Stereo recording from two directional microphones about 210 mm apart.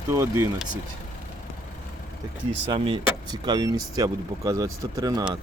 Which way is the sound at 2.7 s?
25° right (ahead or behind).